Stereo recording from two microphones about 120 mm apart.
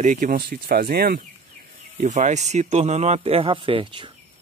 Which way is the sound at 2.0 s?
85° right.